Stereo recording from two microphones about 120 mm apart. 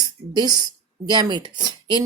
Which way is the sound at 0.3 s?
35° right (ahead or behind).